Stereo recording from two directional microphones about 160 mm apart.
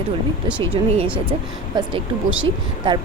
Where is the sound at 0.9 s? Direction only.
35° right (ahead or behind).